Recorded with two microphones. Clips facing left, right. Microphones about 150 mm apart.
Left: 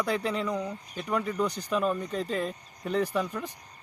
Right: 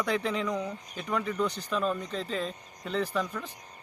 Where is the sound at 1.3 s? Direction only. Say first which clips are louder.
Left 2 dB; 15° left (ahead or behind).